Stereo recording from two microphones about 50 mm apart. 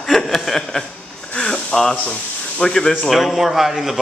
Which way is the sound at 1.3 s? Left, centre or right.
Centre.